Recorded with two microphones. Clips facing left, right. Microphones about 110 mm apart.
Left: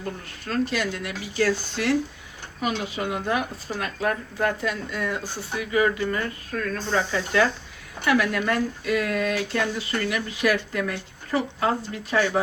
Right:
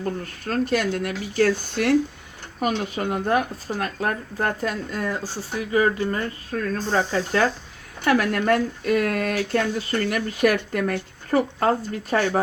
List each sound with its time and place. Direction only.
0.4 s speech: 50° right (ahead or behind)